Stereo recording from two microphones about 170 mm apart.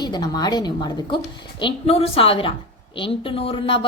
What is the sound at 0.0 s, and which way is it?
A woman's voice, 25° left (ahead or behind).